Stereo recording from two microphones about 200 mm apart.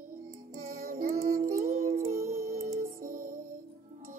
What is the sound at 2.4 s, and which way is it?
Music, 45° right (ahead or behind).